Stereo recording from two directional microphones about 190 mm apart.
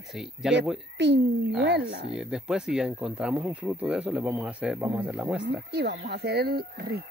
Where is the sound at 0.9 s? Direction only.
65° right (ahead or behind).